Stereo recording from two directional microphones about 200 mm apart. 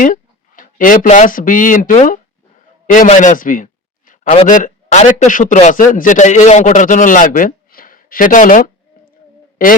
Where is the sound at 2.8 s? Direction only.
40° left (ahead or behind).